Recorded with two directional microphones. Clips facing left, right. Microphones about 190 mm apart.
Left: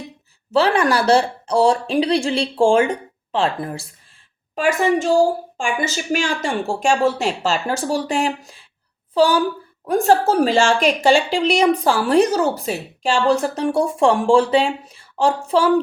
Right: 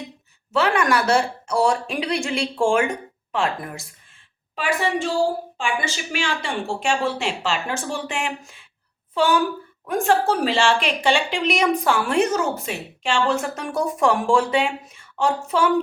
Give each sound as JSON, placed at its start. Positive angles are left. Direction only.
{"t": 0.5, "sound": "a woman's voice", "side_deg": 35}
{"t": 4.5, "sound": "a woman's voice", "side_deg": 45}